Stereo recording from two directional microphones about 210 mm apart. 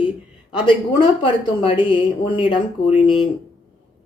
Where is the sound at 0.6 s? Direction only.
25° left (ahead or behind).